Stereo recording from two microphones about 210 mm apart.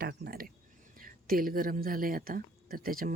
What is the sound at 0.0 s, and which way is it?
Speech, 50° right (ahead or behind).